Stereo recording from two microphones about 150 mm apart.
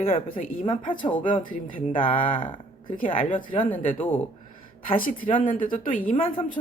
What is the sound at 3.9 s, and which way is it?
Speech, 50° left (ahead or behind).